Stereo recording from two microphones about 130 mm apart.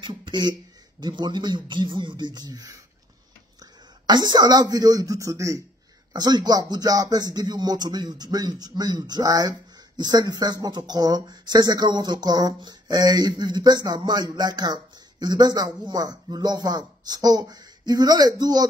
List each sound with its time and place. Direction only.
0.0 s speech: 35° right (ahead or behind)
4.1 s speech: 30° right (ahead or behind)